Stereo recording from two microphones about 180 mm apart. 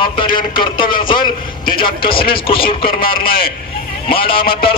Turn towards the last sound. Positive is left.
turn(degrees=30)  # may be behind; listen again after turning